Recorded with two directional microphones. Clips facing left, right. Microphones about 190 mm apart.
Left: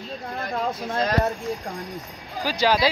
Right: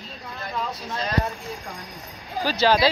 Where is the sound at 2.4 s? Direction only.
10° left (ahead or behind).